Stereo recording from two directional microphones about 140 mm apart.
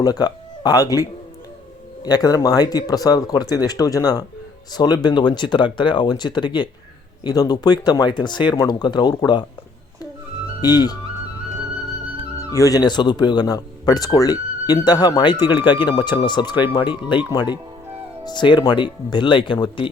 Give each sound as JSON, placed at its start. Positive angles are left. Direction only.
{"t": 0.0, "sound": "speech", "side_deg": 30}
{"t": 2.0, "sound": "speech", "side_deg": 25}
{"t": 10.6, "sound": "speech", "side_deg": 30}
{"t": 12.5, "sound": "speech", "side_deg": 25}